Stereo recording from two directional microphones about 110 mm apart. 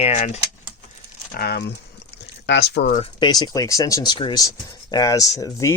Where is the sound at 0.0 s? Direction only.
75° left (ahead or behind).